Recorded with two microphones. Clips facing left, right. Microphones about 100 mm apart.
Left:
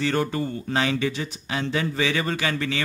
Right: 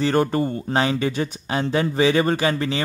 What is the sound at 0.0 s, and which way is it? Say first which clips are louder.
A man's voice: right 5 dB; 40° right (ahead or behind).